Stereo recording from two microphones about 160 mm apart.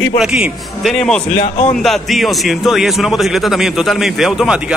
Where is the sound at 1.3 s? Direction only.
45° left (ahead or behind).